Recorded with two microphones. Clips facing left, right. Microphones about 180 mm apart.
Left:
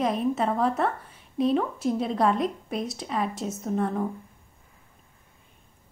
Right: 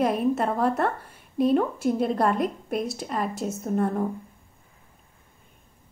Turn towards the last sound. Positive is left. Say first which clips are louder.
# right 2 dB
turn(degrees=-5)  # may be behind; listen again after turning